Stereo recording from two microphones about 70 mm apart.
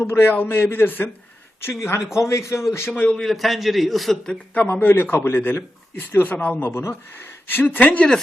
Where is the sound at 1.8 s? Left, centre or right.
Left.